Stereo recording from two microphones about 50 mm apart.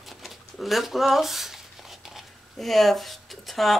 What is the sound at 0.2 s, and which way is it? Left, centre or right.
Speech, centre.